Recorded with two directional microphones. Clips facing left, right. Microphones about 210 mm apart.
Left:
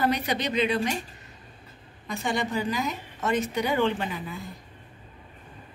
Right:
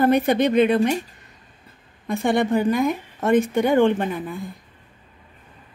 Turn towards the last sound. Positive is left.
turn(degrees=-50)  # may be behind; listen again after turning